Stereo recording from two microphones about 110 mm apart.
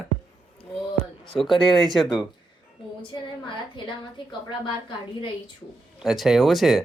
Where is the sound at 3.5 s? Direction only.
45° left (ahead or behind).